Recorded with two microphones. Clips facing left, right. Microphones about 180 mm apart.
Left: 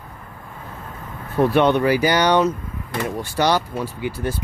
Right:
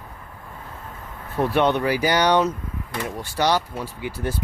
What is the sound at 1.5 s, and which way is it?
Speech, 70° left (ahead or behind).